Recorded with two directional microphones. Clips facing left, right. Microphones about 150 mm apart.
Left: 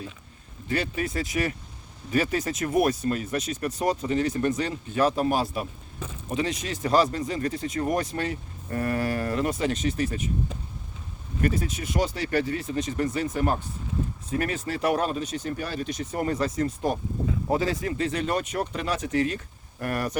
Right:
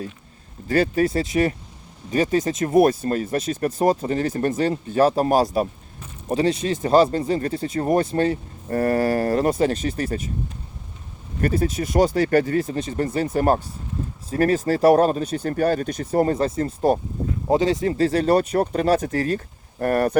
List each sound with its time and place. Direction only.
0.7 s speech: 40° right (ahead or behind)
2.0 s speech: 40° right (ahead or behind)
4.9 s speech: 35° right (ahead or behind)
9.9 s speech: 55° right (ahead or behind)
11.3 s speech: 40° right (ahead or behind)
16.1 s speech: 35° right (ahead or behind)